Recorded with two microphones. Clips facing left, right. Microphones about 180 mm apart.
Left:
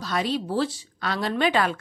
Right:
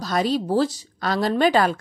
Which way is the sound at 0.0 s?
40° right (ahead or behind).